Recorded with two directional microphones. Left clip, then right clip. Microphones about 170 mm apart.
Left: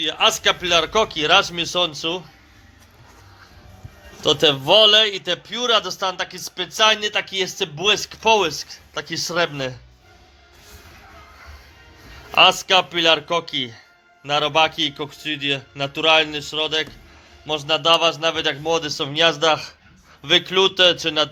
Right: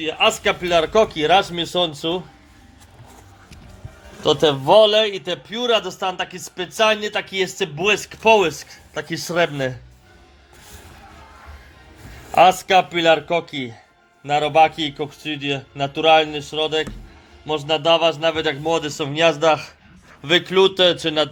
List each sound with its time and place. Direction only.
0.0 s a man's voice: 10° right (ahead or behind)
4.2 s a man's voice: 5° right (ahead or behind); by 9.7 s 20° right (ahead or behind)
12.3 s a man's voice: 20° right (ahead or behind)